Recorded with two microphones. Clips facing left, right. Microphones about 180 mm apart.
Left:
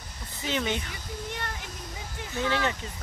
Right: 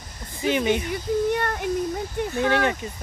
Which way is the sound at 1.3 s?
60° right (ahead or behind).